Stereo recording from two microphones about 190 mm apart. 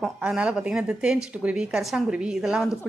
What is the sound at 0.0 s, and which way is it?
A woman's voice, 5° right (ahead or behind).